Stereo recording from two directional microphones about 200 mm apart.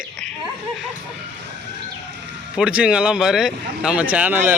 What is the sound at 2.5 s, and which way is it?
Speech, 5° right (ahead or behind).